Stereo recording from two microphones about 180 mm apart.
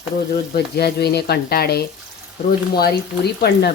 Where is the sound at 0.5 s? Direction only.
60° left (ahead or behind).